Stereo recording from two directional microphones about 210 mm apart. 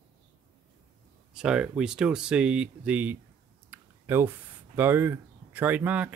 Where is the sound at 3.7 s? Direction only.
10° right (ahead or behind).